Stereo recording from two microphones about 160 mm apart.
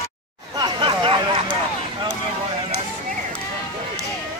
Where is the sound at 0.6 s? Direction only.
30° right (ahead or behind).